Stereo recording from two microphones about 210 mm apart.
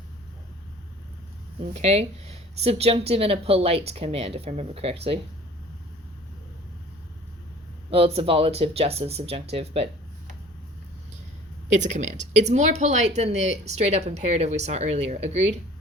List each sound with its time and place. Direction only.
1.7 s speech: 30° right (ahead or behind)
7.9 s speech: 25° right (ahead or behind)
11.7 s speech: 35° right (ahead or behind)